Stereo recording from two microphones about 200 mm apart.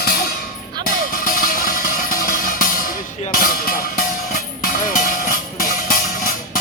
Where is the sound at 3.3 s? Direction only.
45° left (ahead or behind).